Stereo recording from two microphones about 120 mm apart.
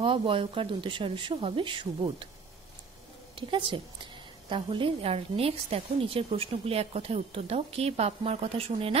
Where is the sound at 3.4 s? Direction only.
45° right (ahead or behind).